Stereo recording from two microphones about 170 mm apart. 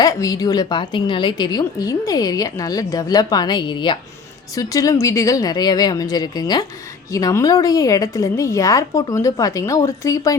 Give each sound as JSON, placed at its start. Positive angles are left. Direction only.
{"t": 0.0, "sound": "a woman's voice", "side_deg": 20}